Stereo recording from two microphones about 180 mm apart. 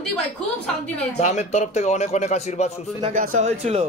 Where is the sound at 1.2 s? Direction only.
40° left (ahead or behind).